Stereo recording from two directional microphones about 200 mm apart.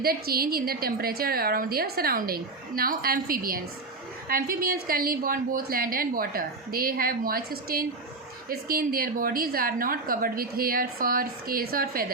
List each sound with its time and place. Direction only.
0.0 s a woman's voice: 50° right (ahead or behind)